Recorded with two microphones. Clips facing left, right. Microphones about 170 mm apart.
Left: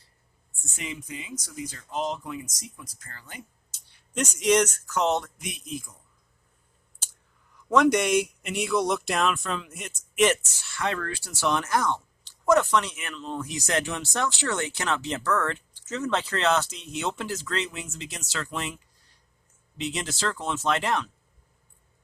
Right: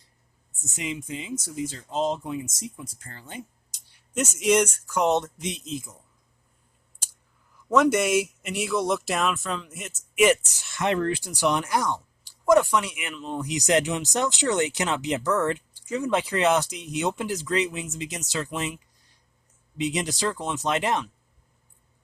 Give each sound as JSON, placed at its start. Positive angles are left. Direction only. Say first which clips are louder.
{"t": 0.6, "sound": "speech", "louder": "right 4 dB", "side_deg": -20}
{"t": 3.7, "sound": "speech", "louder": "right 1 dB", "side_deg": -10}
{"t": 7.7, "sound": "speech", "louder": "even", "side_deg": -5}
{"t": 10.5, "sound": "speech", "louder": "right 4 dB", "side_deg": -15}